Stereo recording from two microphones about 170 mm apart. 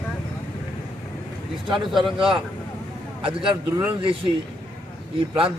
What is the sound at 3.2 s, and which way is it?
A man's voice, 30° right (ahead or behind).